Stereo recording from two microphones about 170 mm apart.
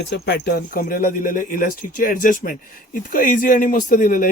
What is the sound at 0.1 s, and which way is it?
Speech, 75° left (ahead or behind).